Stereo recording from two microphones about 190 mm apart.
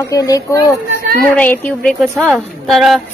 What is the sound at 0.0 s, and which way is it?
A woman's voice, 20° left (ahead or behind).